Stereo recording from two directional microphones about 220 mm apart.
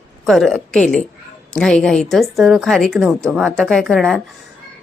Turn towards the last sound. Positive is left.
turn(degrees=0)  # may be behind; listen again after turning